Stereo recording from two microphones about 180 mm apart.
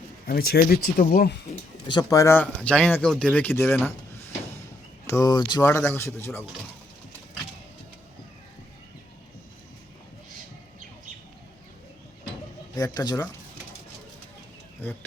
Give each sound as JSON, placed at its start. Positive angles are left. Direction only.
{"t": 0.3, "sound": "speech", "side_deg": 60}
{"t": 1.9, "sound": "speech", "side_deg": 20}
{"t": 5.0, "sound": "speech", "side_deg": 20}
{"t": 12.7, "sound": "speech", "side_deg": 20}